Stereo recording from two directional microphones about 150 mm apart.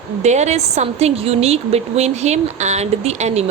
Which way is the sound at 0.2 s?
50° right (ahead or behind).